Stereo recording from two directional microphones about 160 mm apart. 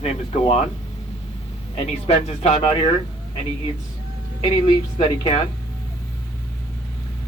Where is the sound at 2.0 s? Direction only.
40° left (ahead or behind).